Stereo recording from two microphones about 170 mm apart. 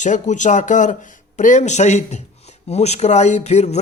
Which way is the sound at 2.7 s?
40° left (ahead or behind).